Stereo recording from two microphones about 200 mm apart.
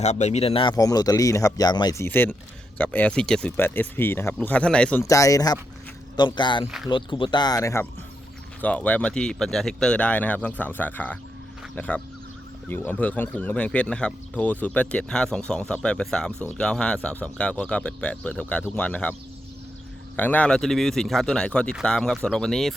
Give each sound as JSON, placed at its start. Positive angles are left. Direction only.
{"t": 0.0, "sound": "speech", "side_deg": 35}
{"t": 20.1, "sound": "speech", "side_deg": 10}